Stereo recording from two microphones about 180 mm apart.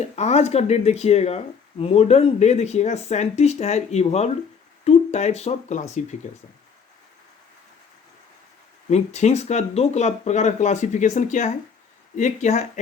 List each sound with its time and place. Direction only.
0.0 s speech: 35° left (ahead or behind)
8.9 s speech: 40° left (ahead or behind)